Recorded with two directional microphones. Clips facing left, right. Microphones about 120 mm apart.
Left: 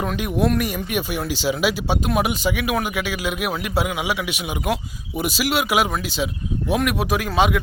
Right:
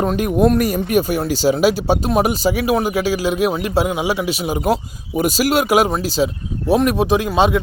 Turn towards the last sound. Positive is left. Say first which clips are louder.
# right 4 dB
turn(degrees=-30)  # may be behind; listen again after turning